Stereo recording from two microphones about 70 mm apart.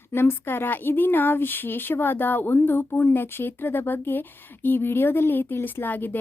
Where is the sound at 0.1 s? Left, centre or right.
Left.